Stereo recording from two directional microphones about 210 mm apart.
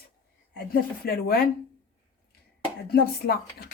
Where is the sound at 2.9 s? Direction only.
45° left (ahead or behind).